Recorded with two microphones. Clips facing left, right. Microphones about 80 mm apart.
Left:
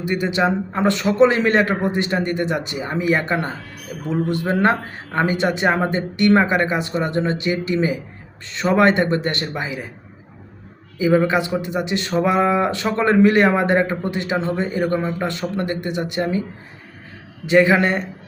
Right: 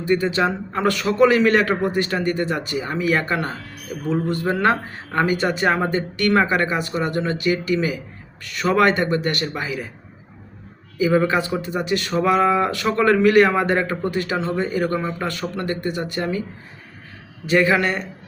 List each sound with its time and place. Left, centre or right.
0.0 s speech: centre
10.9 s speech: left
17.4 s speech: left